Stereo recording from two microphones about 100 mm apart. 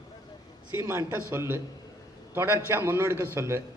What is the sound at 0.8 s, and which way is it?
A man's voice, 30° right (ahead or behind).